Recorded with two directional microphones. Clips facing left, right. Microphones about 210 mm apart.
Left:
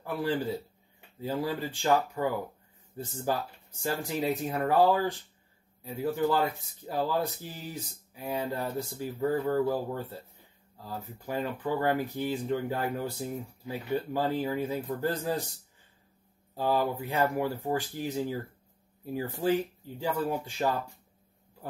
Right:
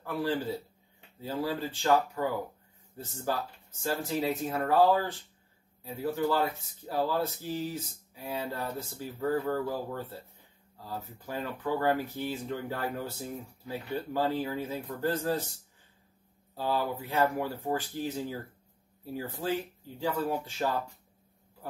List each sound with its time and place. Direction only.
0.0 s speech: 15° left (ahead or behind)
7.0 s speech: 15° left (ahead or behind)
16.5 s speech: 15° left (ahead or behind)
19.4 s speech: 10° left (ahead or behind)